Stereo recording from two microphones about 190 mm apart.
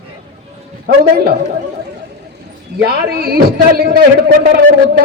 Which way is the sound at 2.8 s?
55° right (ahead or behind).